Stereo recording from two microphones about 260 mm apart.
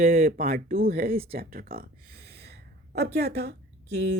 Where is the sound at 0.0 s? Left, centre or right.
Right.